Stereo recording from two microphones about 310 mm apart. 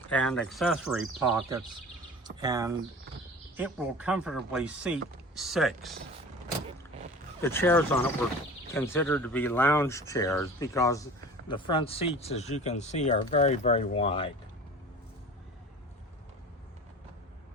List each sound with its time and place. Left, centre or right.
0.1 s speech: centre
7.4 s speech: centre